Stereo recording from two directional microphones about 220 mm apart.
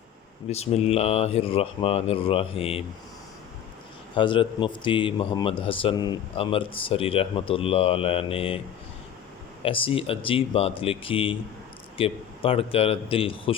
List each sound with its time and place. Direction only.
0.5 s speech: 30° left (ahead or behind)
4.1 s speech: 20° left (ahead or behind)
9.6 s speech: 25° left (ahead or behind)